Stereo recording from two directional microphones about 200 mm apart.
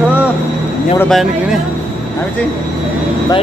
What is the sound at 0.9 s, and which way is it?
Speech, centre (ahead or behind).